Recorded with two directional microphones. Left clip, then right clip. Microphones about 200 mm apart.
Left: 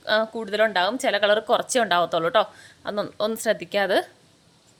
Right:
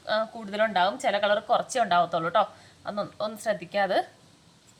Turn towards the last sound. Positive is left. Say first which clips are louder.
# left 3 dB
turn(degrees=55)  # may be behind; listen again after turning